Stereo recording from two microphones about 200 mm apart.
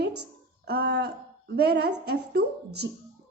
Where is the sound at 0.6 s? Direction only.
55° right (ahead or behind).